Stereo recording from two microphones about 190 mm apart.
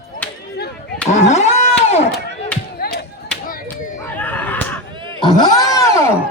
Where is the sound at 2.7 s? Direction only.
55° left (ahead or behind).